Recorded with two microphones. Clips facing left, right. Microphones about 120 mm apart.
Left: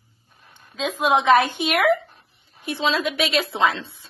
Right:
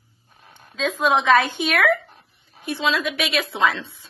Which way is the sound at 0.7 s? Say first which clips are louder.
Even; 15° left (ahead or behind).